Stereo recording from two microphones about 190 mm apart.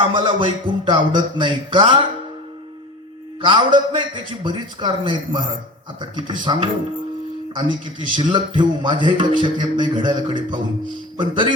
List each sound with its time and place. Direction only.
0.0 s a man's voice: 25° right (ahead or behind)
3.4 s a man's voice: 25° right (ahead or behind)